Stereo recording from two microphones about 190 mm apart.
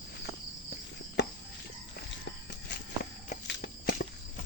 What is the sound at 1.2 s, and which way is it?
Cricket, 60° left (ahead or behind).